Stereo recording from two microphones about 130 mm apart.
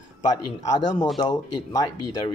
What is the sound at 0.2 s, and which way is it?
Speech, 30° left (ahead or behind).